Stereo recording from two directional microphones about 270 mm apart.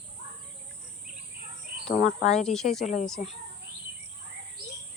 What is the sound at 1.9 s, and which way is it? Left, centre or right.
Speech, left.